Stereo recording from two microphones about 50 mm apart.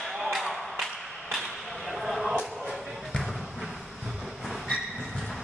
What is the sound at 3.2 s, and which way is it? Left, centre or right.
Basketball bounce, centre.